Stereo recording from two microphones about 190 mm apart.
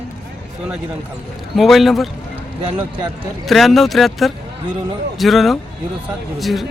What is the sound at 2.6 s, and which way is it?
Speech, 25° right (ahead or behind).